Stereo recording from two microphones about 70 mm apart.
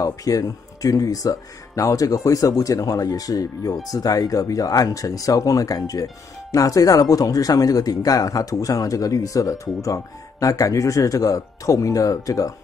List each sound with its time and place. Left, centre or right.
0.0 s speech: left